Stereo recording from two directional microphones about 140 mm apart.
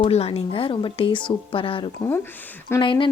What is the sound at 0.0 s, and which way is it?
A woman's voice, 45° left (ahead or behind).